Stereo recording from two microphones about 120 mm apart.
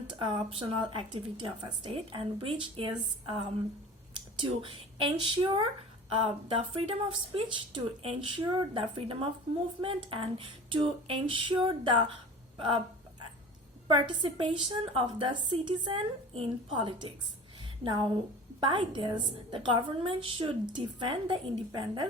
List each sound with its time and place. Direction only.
0.1 s speech: 40° right (ahead or behind)
13.8 s a woman's voice: 45° right (ahead or behind)